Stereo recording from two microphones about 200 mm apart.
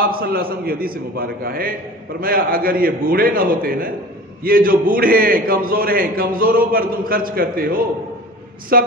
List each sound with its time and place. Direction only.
0.0 s a man's voice: 50° right (ahead or behind)